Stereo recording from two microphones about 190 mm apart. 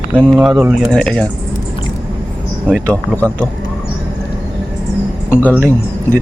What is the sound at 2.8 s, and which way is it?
Speech, 5° left (ahead or behind).